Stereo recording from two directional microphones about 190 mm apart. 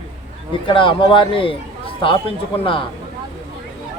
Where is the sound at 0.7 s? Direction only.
25° left (ahead or behind).